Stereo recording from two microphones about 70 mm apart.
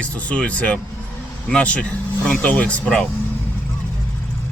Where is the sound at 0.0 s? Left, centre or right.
Centre.